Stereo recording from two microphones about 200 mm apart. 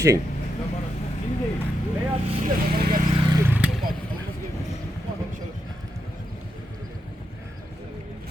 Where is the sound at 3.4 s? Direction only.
10° right (ahead or behind).